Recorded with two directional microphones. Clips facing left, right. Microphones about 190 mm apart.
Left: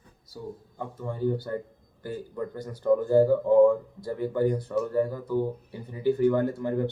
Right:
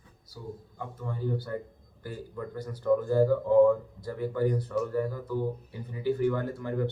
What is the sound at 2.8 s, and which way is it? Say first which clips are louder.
A man's voice: left 3 dB; 25° left (ahead or behind).